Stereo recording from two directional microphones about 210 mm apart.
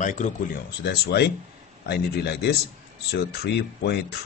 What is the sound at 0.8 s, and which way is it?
Speech, 50° left (ahead or behind).